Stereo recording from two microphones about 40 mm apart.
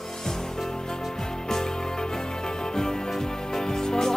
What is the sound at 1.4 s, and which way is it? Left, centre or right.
Music, centre.